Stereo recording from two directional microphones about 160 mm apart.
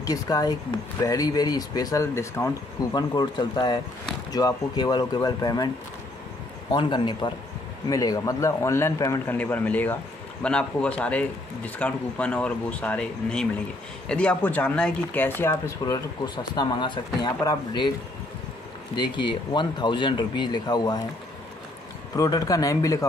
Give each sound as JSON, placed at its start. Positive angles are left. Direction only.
{"t": 0.0, "sound": "speech", "side_deg": 20}
{"t": 6.7, "sound": "a man's voice", "side_deg": 30}
{"t": 18.9, "sound": "speech", "side_deg": 30}
{"t": 22.1, "sound": "speech", "side_deg": 20}